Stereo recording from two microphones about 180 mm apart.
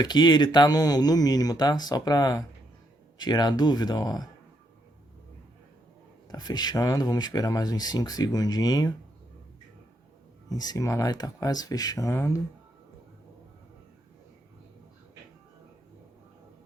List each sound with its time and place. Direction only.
0.0 s speech: 25° left (ahead or behind)
6.2 s speech: 20° left (ahead or behind)
10.5 s speech: 20° left (ahead or behind)